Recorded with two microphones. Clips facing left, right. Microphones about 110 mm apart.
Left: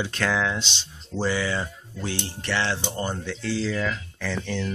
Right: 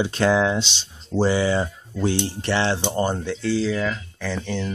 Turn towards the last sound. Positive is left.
turn(degrees=-10)  # may be behind; listen again after turning